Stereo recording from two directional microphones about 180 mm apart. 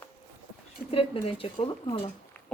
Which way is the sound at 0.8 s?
30° left (ahead or behind).